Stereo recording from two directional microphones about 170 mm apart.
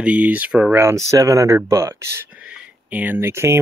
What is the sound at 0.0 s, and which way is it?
Speech, 10° right (ahead or behind).